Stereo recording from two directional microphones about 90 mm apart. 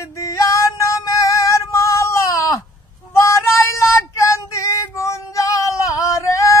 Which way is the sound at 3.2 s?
35° left (ahead or behind).